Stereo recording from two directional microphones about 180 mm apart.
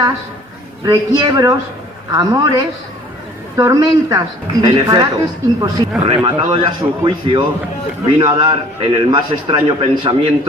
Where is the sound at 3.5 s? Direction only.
20° right (ahead or behind).